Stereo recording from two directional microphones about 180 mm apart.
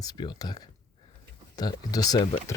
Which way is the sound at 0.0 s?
25° left (ahead or behind).